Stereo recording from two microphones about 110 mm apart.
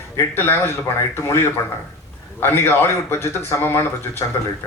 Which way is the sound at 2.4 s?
20° left (ahead or behind).